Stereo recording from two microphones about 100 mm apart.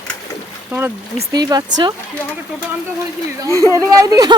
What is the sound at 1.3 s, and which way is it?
Speech, 40° right (ahead or behind).